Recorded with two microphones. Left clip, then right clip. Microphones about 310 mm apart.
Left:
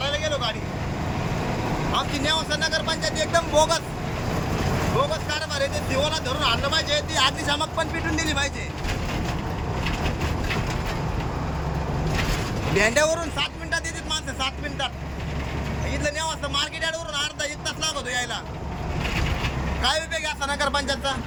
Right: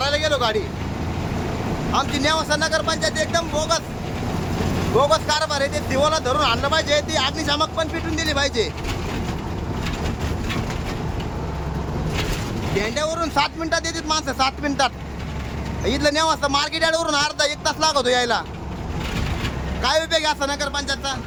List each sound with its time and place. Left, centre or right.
0.0 s vehicle: centre
1.9 s speech: centre
5.1 s speech: centre
12.8 s speech: centre
16.0 s speech: centre
19.8 s speech: centre